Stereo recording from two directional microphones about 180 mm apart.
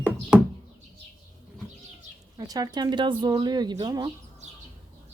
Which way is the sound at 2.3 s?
20° right (ahead or behind).